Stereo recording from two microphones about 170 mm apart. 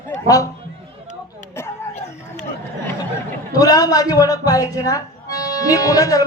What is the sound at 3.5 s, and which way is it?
Speech, 20° left (ahead or behind).